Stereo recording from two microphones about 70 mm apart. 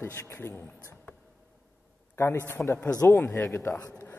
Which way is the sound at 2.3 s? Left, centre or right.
Left.